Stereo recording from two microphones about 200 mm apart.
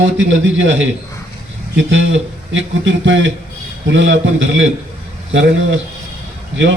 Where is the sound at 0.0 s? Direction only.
65° right (ahead or behind).